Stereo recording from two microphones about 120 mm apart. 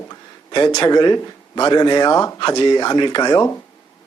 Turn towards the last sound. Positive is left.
turn(degrees=40)  # may be behind; listen again after turning